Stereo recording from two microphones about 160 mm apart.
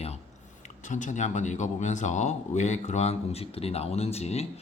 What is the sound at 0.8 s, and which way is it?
Speech, 50° left (ahead or behind).